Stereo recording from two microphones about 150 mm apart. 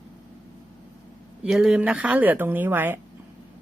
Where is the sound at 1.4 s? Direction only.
5° right (ahead or behind).